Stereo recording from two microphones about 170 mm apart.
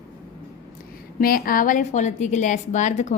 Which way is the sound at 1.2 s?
55° left (ahead or behind).